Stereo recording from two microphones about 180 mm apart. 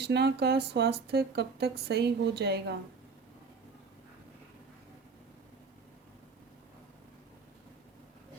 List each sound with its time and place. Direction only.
0.0 s speech: 65° right (ahead or behind)